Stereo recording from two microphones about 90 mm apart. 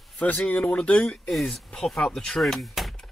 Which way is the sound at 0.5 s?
15° left (ahead or behind).